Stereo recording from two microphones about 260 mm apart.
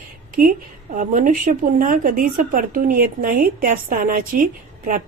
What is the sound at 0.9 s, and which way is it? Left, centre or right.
A woman's voice, right.